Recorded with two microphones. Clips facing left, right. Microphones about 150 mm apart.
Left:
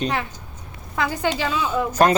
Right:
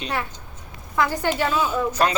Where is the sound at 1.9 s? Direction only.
45° left (ahead or behind).